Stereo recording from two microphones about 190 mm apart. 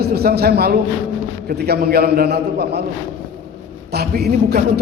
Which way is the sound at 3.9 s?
55° right (ahead or behind).